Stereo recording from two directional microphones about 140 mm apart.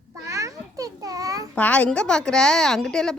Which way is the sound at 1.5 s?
10° left (ahead or behind).